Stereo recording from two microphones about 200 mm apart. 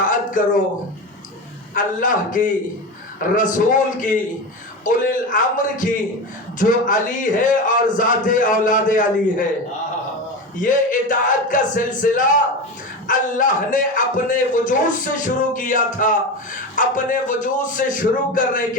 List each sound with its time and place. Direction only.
0.0 s a sound: 40° left (ahead or behind)
1.7 s a man's voice: 40° left (ahead or behind)
10.6 s a man's voice: 40° left (ahead or behind)